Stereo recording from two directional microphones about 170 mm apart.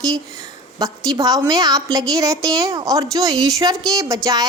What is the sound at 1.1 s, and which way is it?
A woman's voice, 20° right (ahead or behind).